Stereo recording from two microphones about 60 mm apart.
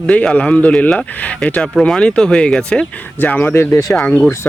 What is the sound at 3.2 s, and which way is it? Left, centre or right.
Speech, left.